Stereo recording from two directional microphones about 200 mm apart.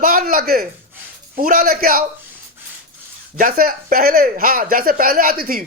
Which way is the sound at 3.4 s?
45° right (ahead or behind).